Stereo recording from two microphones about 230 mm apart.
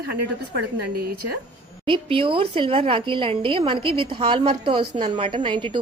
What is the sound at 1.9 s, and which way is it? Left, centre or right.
A woman's voice, right.